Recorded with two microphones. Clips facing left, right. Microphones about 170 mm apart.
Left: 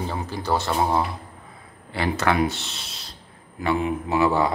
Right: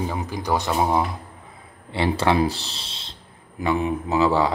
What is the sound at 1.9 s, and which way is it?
Speech, 25° right (ahead or behind).